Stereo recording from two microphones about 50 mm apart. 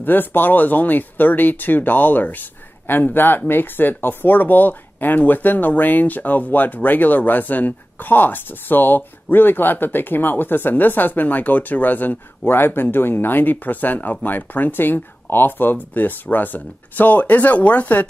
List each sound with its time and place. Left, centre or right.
0.0 s speech: left
12.4 s speech: left